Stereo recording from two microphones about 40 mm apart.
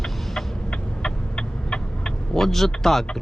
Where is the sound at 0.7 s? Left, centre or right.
Left.